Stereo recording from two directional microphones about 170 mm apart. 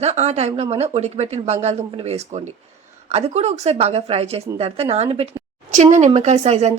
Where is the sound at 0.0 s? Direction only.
40° right (ahead or behind).